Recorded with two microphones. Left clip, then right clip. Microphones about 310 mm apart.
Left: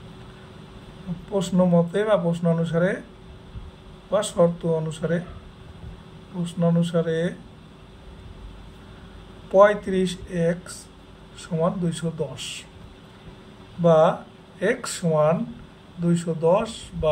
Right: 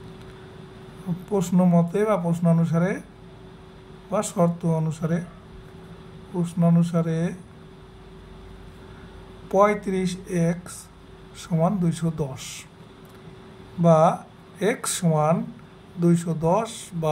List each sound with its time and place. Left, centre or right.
1.3 s speech: right
4.1 s speech: right
6.4 s speech: right
9.5 s speech: right
13.8 s speech: right